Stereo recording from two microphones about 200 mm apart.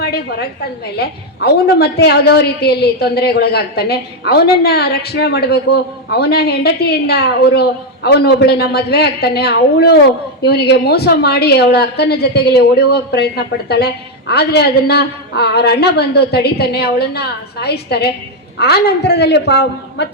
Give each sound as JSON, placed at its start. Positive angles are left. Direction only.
{"t": 0.0, "sound": "a woman's voice", "side_deg": 50}